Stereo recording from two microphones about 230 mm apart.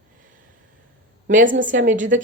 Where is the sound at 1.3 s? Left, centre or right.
Right.